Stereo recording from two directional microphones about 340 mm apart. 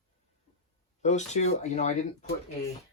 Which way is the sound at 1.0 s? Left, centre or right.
Centre.